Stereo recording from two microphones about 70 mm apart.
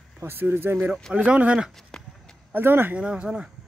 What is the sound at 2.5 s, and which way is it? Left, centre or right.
Speech, right.